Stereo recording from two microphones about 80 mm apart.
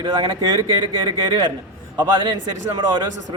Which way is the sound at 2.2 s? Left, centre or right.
Right.